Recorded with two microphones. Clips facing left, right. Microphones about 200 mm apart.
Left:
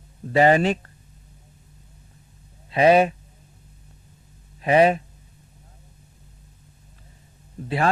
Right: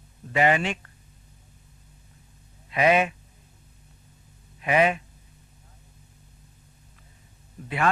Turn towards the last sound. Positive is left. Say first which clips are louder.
# left 7 dB
turn(degrees=30)  # may be behind; listen again after turning